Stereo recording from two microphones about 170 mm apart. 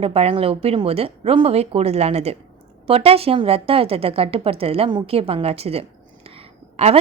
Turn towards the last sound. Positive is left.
turn(degrees=-35)  # may be behind; listen again after turning